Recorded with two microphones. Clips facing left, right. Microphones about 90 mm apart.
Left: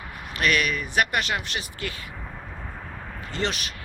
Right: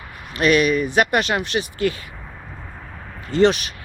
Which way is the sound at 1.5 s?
35° right (ahead or behind).